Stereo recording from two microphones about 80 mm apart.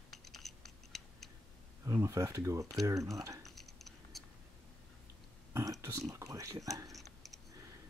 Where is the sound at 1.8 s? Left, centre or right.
Right.